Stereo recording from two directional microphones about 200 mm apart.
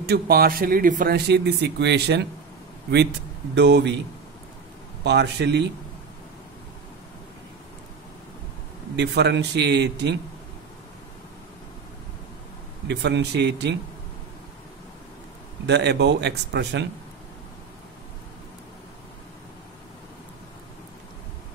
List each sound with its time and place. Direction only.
0.0 s speech: 50° right (ahead or behind)
5.0 s speech: 60° right (ahead or behind)
8.9 s speech: 60° right (ahead or behind)
12.8 s speech: 60° right (ahead or behind)
15.6 s speech: 60° right (ahead or behind)